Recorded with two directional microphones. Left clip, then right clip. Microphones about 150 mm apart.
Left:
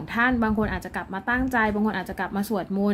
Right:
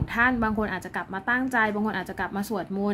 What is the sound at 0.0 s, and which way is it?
A woman's voice, 5° left (ahead or behind).